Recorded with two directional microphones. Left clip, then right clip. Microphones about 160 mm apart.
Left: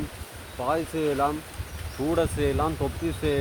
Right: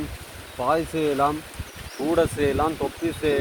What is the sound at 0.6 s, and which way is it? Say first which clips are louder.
Speech: right 4 dB; 40° right (ahead or behind).